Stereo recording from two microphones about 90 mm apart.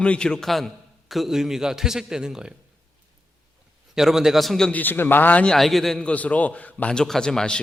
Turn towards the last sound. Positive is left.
turn(degrees=10)  # may be behind; listen again after turning